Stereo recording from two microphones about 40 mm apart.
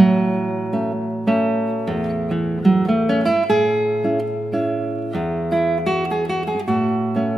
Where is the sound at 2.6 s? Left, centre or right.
Centre.